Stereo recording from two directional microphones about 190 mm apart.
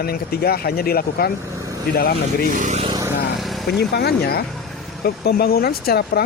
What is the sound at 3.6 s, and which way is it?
Speech, 55° left (ahead or behind).